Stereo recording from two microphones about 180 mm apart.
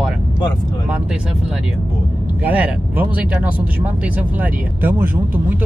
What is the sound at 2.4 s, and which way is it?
Speech, 10° right (ahead or behind).